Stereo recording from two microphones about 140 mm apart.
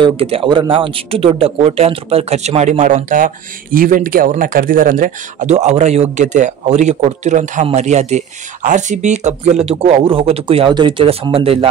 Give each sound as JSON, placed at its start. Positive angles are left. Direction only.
{"t": 0.0, "sound": "speech", "side_deg": -40}